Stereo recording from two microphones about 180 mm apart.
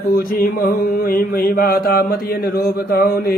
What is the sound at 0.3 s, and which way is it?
Speech, 55° left (ahead or behind).